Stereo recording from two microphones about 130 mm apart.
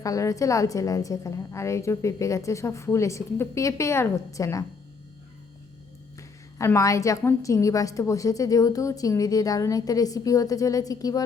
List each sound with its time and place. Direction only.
0.0 s a woman's voice: 25° left (ahead or behind)
6.1 s a woman's voice: 25° left (ahead or behind)